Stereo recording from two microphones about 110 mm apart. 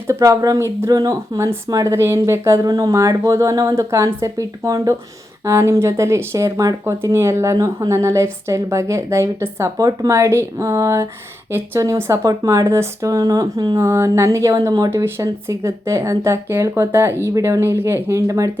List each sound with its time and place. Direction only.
0.1 s speech: 30° right (ahead or behind)